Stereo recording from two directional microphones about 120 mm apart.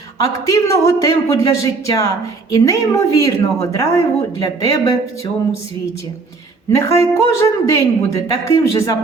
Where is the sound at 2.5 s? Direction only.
25° left (ahead or behind).